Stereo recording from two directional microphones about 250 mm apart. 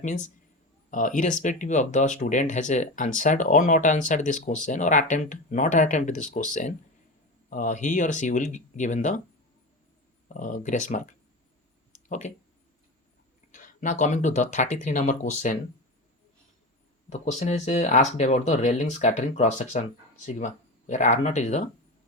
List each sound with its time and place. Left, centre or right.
0.9 s speech: left
10.2 s speech: left
13.5 s speech: left
17.1 s speech: left